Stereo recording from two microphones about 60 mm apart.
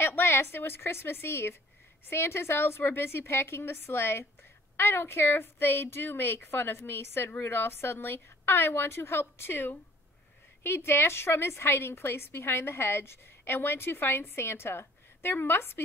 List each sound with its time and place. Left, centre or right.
0.0 s a woman's voice: left